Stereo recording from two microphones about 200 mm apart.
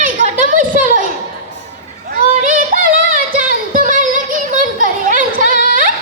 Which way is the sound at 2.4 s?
40° right (ahead or behind).